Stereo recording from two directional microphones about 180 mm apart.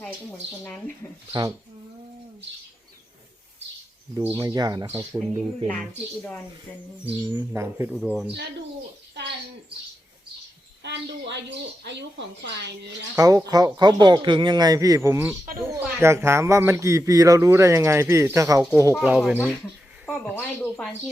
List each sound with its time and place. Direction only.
1.3 s a man's voice: 20° right (ahead or behind)
4.2 s a man's voice: 15° right (ahead or behind)
5.6 s speech: 5° left (ahead or behind)
7.5 s speech: 15° right (ahead or behind)
7.9 s speech: centre (ahead or behind)
9.1 s a woman's voice: 70° right (ahead or behind)
10.8 s a woman's voice: 75° right (ahead or behind)
13.1 s a man's voice: 20° right (ahead or behind)
18.9 s speech: 5° right (ahead or behind)
20.1 s speech: 10° left (ahead or behind)